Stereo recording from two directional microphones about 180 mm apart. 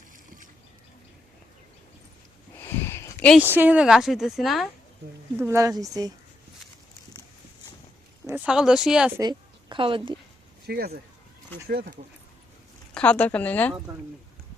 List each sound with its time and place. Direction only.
2.6 s a sound: 15° left (ahead or behind)
3.3 s a woman's voice: 10° right (ahead or behind)
5.4 s speech: 15° right (ahead or behind)
8.3 s a woman's voice: 5° right (ahead or behind)
9.1 s a woman's voice: 25° right (ahead or behind)
10.7 s speech: 60° right (ahead or behind)
12.9 s speech: 5° left (ahead or behind)